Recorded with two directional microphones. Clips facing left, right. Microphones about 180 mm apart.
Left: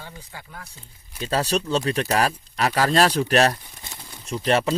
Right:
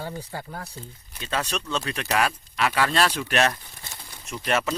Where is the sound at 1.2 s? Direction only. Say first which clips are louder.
Left 6 dB; 35° left (ahead or behind).